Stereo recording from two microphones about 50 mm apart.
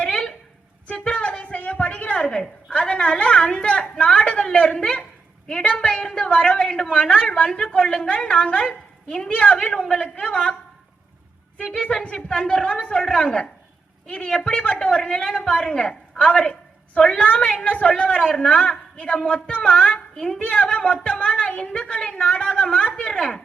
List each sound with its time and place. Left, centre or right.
0.0 s a sound: left
5.8 s a woman's voice: centre
9.6 s a man's voice: centre
11.5 s a woman's voice: left
20.1 s a man's voice: centre
20.4 s a woman's voice: left